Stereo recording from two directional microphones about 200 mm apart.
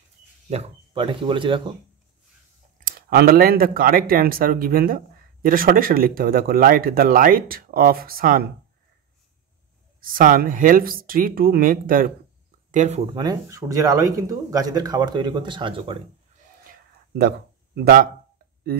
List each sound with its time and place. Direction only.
0.5 s speech: 30° right (ahead or behind)
2.8 s speech: 45° right (ahead or behind)
9.9 s speech: 45° right (ahead or behind)
12.7 s speech: 35° right (ahead or behind)
13.1 s speech: 20° right (ahead or behind)
17.7 s speech: 45° right (ahead or behind)